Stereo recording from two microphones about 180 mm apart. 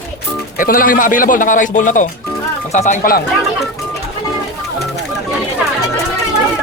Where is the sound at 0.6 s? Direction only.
50° left (ahead or behind).